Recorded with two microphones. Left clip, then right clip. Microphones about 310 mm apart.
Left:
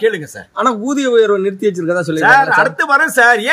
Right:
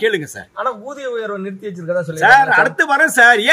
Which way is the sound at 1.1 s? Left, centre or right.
Left.